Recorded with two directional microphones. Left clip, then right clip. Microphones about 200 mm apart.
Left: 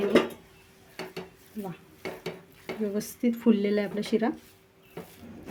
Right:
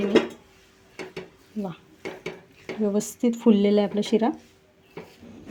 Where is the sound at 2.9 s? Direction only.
20° right (ahead or behind).